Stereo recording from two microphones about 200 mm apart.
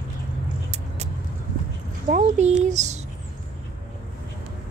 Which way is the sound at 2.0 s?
35° right (ahead or behind).